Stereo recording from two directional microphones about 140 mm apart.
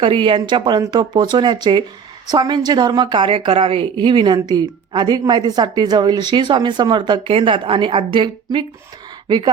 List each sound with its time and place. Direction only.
0.0 s a woman's voice: 40° right (ahead or behind)